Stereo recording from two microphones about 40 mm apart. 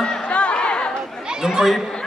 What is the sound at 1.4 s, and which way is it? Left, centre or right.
Speech, centre.